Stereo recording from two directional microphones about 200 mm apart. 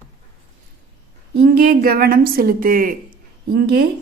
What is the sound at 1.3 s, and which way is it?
A woman's voice, 50° right (ahead or behind).